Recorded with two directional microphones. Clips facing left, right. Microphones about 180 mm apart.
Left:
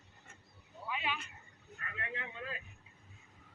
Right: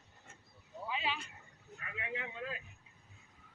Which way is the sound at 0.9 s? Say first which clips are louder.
Even; 30° right (ahead or behind).